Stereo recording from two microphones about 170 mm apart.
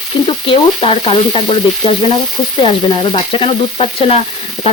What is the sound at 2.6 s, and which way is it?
Frying, 30° left (ahead or behind).